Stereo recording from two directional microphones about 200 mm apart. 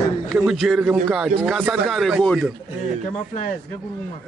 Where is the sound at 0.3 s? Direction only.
Centre (ahead or behind).